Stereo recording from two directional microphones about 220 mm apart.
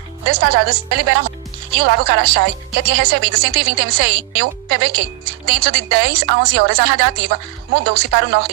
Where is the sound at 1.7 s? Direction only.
45° right (ahead or behind).